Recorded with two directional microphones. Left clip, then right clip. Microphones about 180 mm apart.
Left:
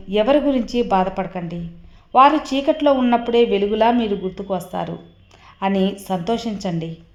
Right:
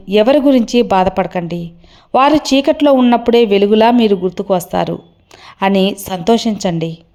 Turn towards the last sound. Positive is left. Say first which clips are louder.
# right 9 dB
turn(degrees=-35)  # may be behind; listen again after turning